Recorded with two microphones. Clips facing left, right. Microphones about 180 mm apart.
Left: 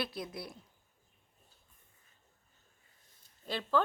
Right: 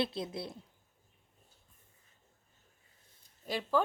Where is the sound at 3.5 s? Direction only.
10° right (ahead or behind).